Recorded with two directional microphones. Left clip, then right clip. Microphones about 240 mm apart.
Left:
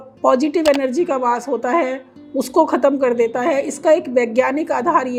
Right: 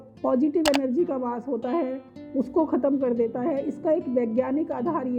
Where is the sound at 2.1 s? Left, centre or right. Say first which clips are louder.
Left 6 dB; centre.